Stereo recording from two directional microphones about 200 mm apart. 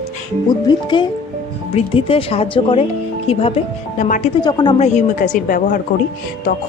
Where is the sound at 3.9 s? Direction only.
40° left (ahead or behind).